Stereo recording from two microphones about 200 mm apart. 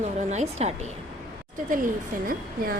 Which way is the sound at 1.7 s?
45° right (ahead or behind).